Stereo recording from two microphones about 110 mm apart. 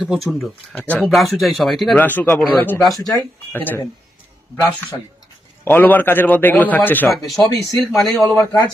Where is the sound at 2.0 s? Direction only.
15° left (ahead or behind).